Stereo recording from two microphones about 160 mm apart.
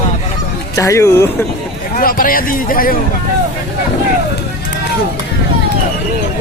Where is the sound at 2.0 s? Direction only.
60° left (ahead or behind).